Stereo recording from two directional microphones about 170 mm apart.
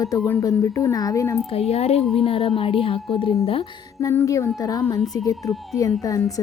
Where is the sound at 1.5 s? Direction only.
35° left (ahead or behind).